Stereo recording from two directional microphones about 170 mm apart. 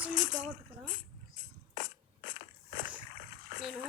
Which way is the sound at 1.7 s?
65° left (ahead or behind).